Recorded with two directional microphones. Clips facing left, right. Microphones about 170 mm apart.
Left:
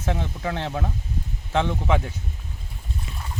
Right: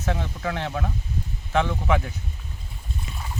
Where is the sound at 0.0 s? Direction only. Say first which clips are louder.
Even; 20° left (ahead or behind).